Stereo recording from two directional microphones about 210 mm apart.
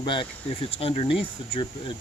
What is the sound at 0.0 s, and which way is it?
Speech, 25° left (ahead or behind).